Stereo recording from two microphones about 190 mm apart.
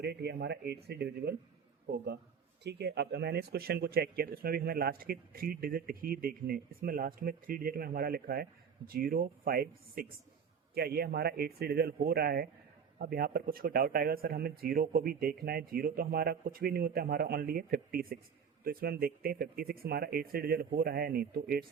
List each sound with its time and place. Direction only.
0.0 s speech: 60° right (ahead or behind)
2.6 s speech: 65° right (ahead or behind)